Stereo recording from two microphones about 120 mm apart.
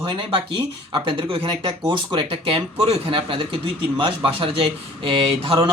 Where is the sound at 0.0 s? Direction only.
45° right (ahead or behind).